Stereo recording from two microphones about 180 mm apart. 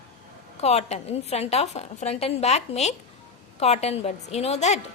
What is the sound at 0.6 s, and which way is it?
A woman's voice, 35° left (ahead or behind).